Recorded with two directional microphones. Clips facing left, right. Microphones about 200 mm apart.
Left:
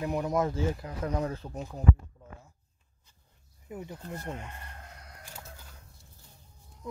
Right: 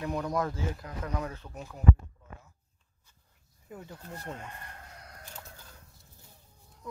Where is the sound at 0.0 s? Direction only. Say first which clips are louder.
Left 3 dB; 20° left (ahead or behind).